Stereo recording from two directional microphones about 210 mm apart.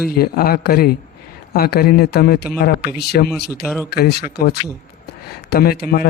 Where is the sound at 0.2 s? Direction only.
45° left (ahead or behind).